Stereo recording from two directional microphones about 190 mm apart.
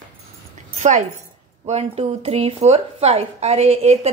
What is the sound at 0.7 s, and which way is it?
A woman's voice, 40° right (ahead or behind).